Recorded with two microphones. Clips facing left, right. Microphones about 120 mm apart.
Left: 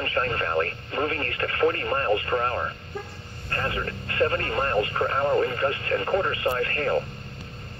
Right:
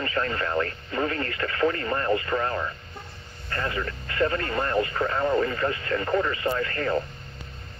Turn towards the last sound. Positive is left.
turn(degrees=45)  # may be behind; listen again after turning